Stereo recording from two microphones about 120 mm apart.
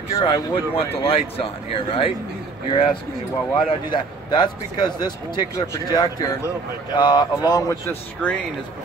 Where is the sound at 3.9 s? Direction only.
40° left (ahead or behind).